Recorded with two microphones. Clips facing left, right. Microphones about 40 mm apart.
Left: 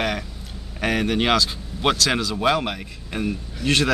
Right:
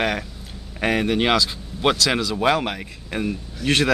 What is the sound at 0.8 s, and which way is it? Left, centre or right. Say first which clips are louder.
Speech: right 1 dB; right.